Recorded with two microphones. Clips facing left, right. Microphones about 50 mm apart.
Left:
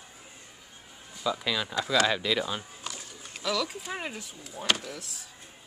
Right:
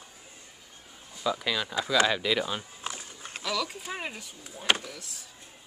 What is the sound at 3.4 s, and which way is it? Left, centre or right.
A woman's voice, centre.